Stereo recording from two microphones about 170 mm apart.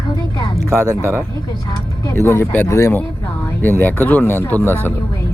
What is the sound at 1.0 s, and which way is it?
Speech, 15° right (ahead or behind).